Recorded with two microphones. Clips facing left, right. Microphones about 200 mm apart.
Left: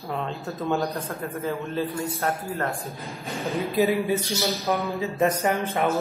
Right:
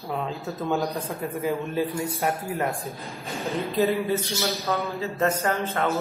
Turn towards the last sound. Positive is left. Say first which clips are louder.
# left 2 dB
turn(degrees=15)  # may be behind; listen again after turning